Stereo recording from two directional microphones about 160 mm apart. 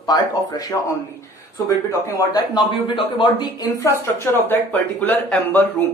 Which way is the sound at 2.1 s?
25° left (ahead or behind).